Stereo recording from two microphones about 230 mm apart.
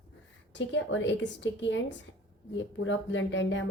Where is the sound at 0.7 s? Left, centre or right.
Left.